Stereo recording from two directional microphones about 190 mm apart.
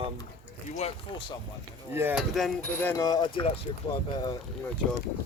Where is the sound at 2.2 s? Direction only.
Centre (ahead or behind).